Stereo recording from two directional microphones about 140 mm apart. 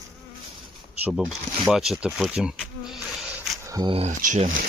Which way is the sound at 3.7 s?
25° right (ahead or behind).